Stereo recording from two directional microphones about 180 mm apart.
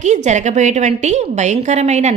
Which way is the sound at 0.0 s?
40° right (ahead or behind).